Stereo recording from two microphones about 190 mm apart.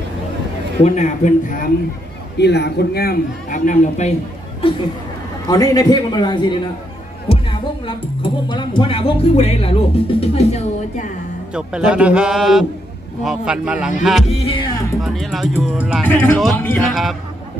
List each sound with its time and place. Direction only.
0.8 s a man's voice: 40° left (ahead or behind)
2.3 s a man's voice: 60° left (ahead or behind); by 4.1 s 40° left (ahead or behind)
4.6 s speech: 30° left (ahead or behind)
11.5 s a man's voice: 5° right (ahead or behind)
14.4 s speech: 30° left (ahead or behind)
15.0 s a man's voice: centre (ahead or behind)
16.1 s a man's voice: 10° left (ahead or behind)